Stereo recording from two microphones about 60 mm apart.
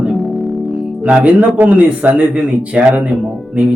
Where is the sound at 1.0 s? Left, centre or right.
Centre.